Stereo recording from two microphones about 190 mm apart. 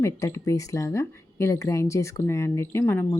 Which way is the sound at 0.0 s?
15° left (ahead or behind).